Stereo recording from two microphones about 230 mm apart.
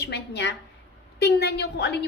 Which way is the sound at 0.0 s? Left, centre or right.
Left.